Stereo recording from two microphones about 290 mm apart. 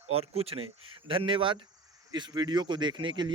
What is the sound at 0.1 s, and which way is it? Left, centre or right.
Speech, centre.